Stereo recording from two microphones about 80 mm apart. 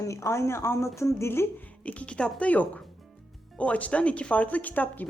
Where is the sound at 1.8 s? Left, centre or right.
Centre.